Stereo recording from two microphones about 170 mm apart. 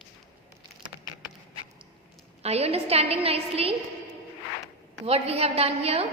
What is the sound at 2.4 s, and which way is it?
A woman's voice, 35° right (ahead or behind).